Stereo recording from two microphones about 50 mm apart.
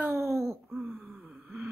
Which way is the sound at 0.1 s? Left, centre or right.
Right.